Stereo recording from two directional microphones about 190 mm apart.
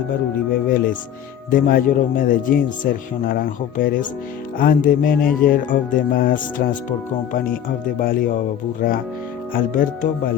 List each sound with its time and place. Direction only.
0.5 s speech: 50° left (ahead or behind)
9.5 s speech: 45° left (ahead or behind)